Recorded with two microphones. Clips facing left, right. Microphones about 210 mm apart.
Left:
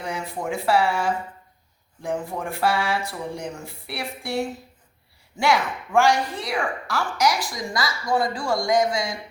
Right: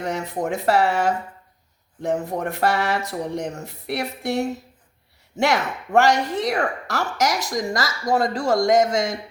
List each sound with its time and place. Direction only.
0.0 s a woman's voice: 40° right (ahead or behind)